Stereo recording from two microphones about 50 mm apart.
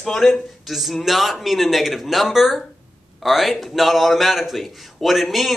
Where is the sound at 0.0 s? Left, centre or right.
Centre.